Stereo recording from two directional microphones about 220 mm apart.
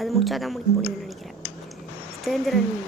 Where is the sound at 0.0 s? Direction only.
Centre (ahead or behind).